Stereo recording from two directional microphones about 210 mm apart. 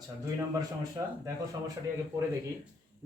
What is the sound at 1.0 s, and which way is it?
Speech, 15° right (ahead or behind).